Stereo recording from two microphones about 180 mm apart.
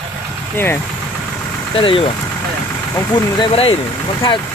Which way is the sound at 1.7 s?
30° left (ahead or behind).